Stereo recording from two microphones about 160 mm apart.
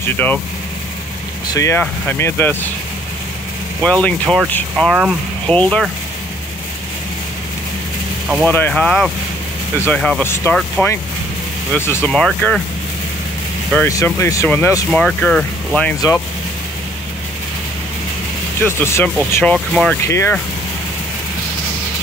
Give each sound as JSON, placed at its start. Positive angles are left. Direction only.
{"t": 0.0, "sound": "speech", "side_deg": 10}
{"t": 1.5, "sound": "speech", "side_deg": 20}
{"t": 3.8, "sound": "speech", "side_deg": 5}
{"t": 8.5, "sound": "speech", "side_deg": 10}
{"t": 13.8, "sound": "speech", "side_deg": 15}
{"t": 14.9, "sound": "speech", "side_deg": 5}
{"t": 18.6, "sound": "speech", "side_deg": 15}
{"t": 20.0, "sound": "speech", "side_deg": 15}